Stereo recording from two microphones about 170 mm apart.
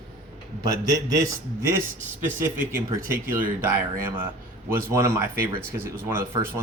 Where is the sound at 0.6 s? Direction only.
20° right (ahead or behind).